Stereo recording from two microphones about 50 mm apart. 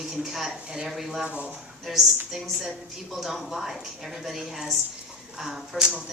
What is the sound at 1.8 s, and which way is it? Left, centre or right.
A woman's voice, centre.